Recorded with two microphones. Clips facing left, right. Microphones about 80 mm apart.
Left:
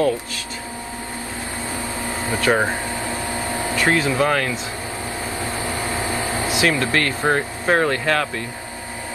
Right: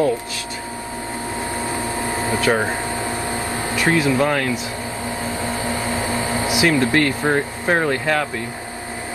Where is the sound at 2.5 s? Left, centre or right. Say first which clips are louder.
Left 2 dB; centre.